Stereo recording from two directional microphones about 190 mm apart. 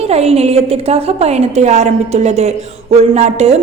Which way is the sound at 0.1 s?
35° right (ahead or behind).